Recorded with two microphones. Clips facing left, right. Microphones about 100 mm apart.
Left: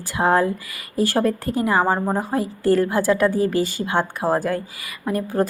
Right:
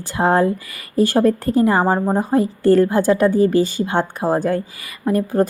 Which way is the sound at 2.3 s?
30° right (ahead or behind).